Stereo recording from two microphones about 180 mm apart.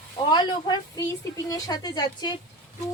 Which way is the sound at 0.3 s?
25° left (ahead or behind).